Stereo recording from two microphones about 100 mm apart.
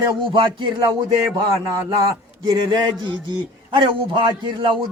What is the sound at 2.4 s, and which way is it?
Speech, 45° right (ahead or behind).